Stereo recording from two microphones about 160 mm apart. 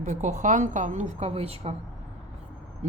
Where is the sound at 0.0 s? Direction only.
45° right (ahead or behind).